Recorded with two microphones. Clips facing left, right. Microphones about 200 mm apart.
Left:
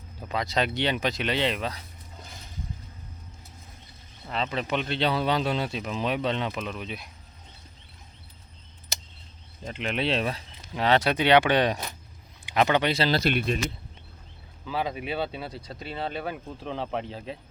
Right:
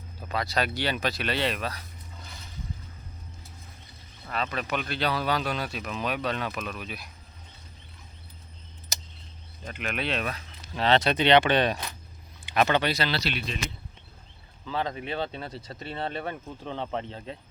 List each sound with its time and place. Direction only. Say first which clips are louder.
0.3 s speech: left 1 dB; 20° left (ahead or behind)
2.2 s a sound: left 1 dB; 45° left (ahead or behind)
4.3 s speech: left 2 dB; 25° left (ahead or behind)
9.6 s speech: left 4 dB; 25° left (ahead or behind)
10.8 s speech: even; 10° left (ahead or behind)
13.1 s speech: left 6 dB; 50° left (ahead or behind)
14.6 s speech: left 1 dB; 10° left (ahead or behind)